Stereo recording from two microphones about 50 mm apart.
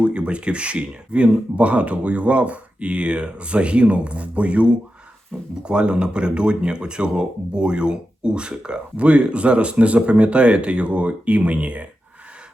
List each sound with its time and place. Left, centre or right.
0.0 s speech: right
5.3 s speech: centre
5.6 s speech: centre